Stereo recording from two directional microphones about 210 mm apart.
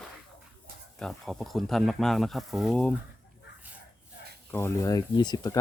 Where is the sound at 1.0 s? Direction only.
Centre (ahead or behind).